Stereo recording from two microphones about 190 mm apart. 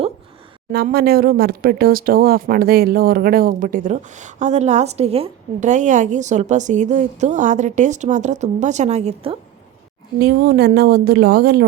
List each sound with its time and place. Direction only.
0.7 s speech: 55° right (ahead or behind); by 9.4 s 30° right (ahead or behind)
10.2 s speech: 55° right (ahead or behind)